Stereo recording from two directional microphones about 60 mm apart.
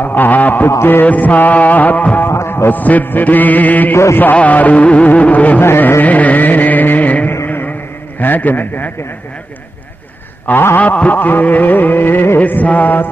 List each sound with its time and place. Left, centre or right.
0.0 s music: left
0.7 s a sound: left
1.0 s music: left
2.2 s a sound: left
2.7 s music: left
3.9 s a sound: left
4.2 s music: left
5.6 s carnatic music: left
7.4 s a sound: left
8.2 s music: left
10.4 s music: left
10.8 s music: left